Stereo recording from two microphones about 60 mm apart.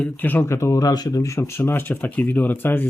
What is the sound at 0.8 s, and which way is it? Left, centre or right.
Speech, left.